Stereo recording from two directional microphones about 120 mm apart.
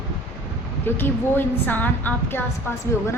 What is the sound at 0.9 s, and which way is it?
A woman's voice, 20° left (ahead or behind).